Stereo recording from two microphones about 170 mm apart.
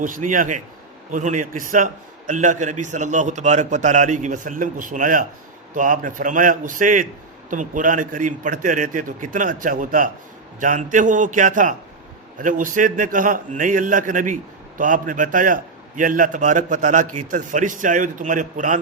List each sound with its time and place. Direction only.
0.0 s a man's voice: 50° right (ahead or behind)